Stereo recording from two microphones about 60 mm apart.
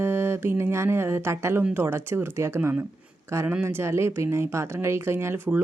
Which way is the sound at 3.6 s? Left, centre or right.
Right.